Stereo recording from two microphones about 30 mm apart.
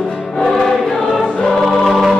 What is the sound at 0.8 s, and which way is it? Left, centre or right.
Choir, centre.